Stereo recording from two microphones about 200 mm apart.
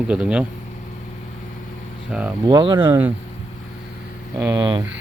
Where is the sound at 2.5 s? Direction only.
20° right (ahead or behind).